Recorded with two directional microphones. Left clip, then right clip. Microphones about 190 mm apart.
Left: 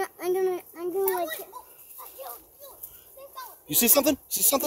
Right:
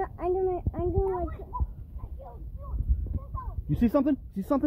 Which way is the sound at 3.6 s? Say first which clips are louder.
Left 3 dB; 45° left (ahead or behind).